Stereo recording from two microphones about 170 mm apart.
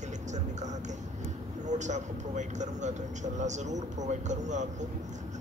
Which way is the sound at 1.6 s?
45° right (ahead or behind).